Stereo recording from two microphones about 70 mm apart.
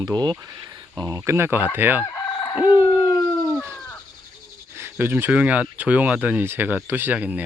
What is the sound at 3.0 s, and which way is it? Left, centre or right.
Dog, left.